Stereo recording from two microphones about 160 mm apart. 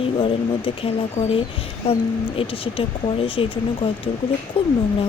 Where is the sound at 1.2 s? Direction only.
20° left (ahead or behind).